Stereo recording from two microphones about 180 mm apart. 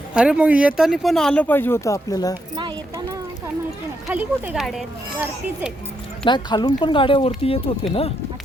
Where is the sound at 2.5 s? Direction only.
25° right (ahead or behind).